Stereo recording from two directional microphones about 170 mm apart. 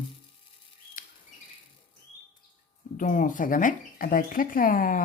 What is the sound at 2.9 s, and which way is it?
Speech, 50° left (ahead or behind).